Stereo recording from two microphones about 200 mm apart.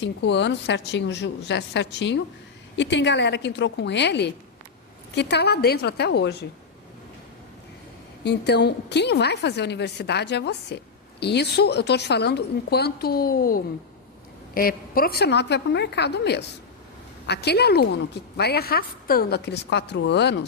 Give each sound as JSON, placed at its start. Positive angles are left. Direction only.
{"t": 0.0, "sound": "a woman's voice", "side_deg": 60}
{"t": 8.2, "sound": "a woman's voice", "side_deg": 55}